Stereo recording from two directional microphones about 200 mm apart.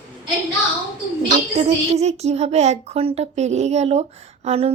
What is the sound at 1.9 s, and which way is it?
A child's voice, 35° right (ahead or behind).